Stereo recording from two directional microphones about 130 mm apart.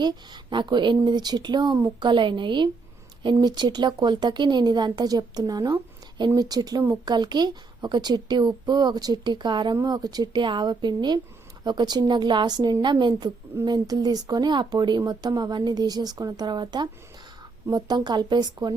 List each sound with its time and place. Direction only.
0.5 s speech: 35° right (ahead or behind)